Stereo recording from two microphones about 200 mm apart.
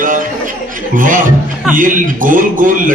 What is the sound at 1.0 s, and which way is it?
Speech, 40° right (ahead or behind).